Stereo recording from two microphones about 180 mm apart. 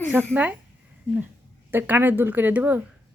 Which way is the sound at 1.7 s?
10° right (ahead or behind).